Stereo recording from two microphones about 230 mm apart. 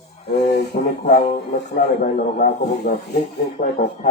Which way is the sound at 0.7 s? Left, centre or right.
Left.